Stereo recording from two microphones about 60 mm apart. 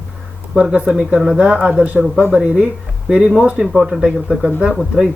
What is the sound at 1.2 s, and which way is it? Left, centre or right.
Speech, centre.